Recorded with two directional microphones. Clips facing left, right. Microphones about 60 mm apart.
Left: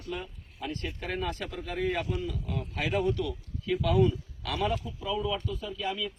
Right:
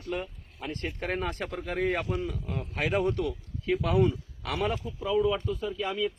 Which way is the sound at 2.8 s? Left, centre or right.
Right.